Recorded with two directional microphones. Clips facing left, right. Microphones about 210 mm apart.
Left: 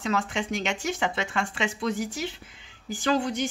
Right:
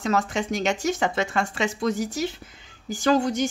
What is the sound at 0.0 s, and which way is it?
Speech, 40° right (ahead or behind).